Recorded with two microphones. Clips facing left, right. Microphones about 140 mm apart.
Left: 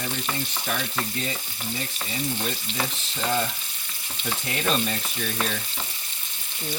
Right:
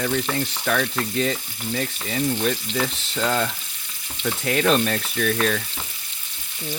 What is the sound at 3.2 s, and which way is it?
Water tap, 80° right.